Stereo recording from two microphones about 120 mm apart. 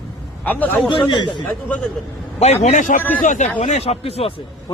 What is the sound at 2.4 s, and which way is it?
Speech, 65° left (ahead or behind).